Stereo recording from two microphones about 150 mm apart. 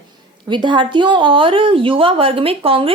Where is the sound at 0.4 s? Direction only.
30° right (ahead or behind).